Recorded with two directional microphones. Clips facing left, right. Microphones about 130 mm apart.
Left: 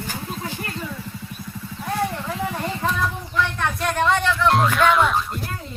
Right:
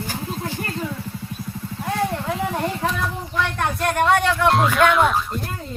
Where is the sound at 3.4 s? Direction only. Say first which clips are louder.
Right 2 dB; 55° right (ahead or behind).